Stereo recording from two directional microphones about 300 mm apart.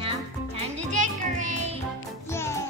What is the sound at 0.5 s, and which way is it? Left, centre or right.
Music, right.